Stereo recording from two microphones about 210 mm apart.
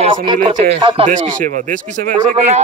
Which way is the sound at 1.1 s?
40° right (ahead or behind).